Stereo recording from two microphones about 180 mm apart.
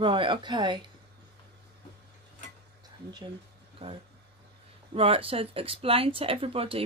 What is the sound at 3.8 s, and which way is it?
Speech, 35° right (ahead or behind).